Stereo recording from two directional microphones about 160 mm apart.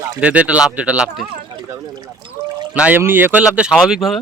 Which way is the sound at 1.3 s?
30° right (ahead or behind).